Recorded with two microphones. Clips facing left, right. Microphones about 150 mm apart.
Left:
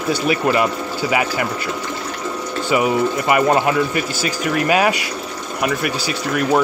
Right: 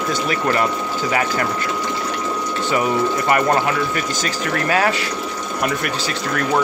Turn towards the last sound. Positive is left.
turn(degrees=10)  # may be behind; listen again after turning